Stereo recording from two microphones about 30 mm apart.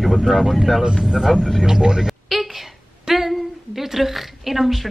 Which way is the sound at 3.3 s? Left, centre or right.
Centre.